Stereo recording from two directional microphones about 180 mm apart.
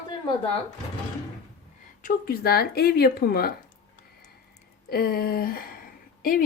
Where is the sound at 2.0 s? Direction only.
55° left (ahead or behind).